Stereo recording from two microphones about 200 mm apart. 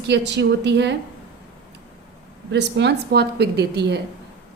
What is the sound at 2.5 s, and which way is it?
A woman's voice, 60° right (ahead or behind).